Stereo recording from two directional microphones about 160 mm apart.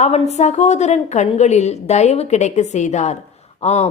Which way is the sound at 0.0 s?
45° left (ahead or behind).